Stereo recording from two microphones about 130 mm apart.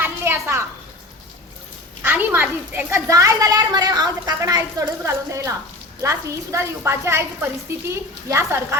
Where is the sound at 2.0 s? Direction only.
15° right (ahead or behind).